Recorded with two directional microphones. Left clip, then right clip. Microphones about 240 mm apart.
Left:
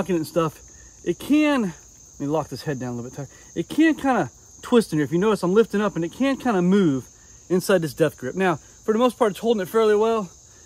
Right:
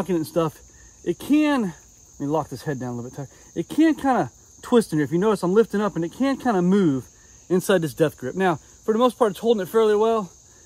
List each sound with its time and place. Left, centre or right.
0.0 s cricket: centre